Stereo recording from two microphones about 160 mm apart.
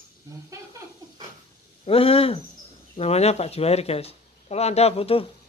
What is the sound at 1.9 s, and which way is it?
Speech, 35° left (ahead or behind).